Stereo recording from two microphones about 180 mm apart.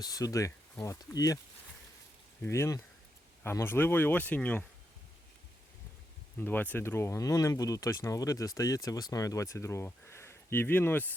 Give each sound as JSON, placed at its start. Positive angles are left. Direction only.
{"t": 0.0, "sound": "speech", "side_deg": 20}
{"t": 2.4, "sound": "speech", "side_deg": 15}
{"t": 6.4, "sound": "speech", "side_deg": 10}